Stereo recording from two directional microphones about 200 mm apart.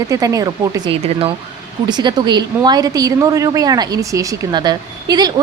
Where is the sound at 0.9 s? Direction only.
30° right (ahead or behind).